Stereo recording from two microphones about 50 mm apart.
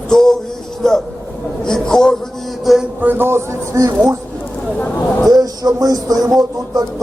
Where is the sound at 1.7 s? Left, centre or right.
Centre.